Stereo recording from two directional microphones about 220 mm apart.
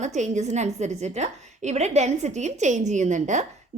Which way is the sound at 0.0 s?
30° right (ahead or behind).